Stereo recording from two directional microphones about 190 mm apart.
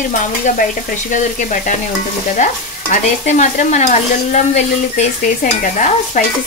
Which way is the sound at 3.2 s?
40° left (ahead or behind).